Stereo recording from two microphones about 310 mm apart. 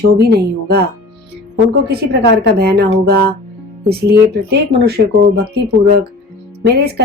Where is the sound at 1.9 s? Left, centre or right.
Right.